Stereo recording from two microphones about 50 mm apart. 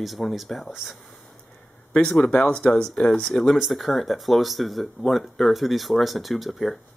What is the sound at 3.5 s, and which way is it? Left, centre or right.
Speech, centre.